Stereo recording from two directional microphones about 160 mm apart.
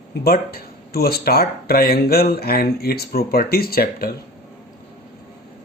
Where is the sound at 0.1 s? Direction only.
75° left (ahead or behind).